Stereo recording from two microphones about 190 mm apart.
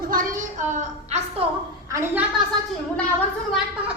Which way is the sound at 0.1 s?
45° right (ahead or behind).